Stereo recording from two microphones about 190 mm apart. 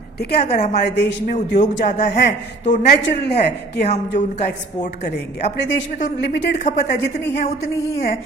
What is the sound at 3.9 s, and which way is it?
Speech, 60° left (ahead or behind).